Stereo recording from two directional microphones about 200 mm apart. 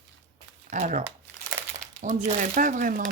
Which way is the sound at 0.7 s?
40° right (ahead or behind).